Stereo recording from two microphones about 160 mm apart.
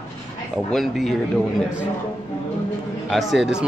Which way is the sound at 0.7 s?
Centre (ahead or behind).